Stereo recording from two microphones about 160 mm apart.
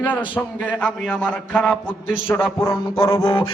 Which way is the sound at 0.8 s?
10° left (ahead or behind).